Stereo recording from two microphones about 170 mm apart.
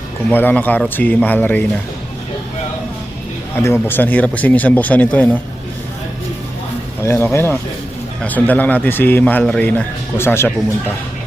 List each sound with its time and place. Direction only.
0.3 s speech: 10° left (ahead or behind)
3.5 s speech: 15° left (ahead or behind)
7.0 s speech: 15° left (ahead or behind)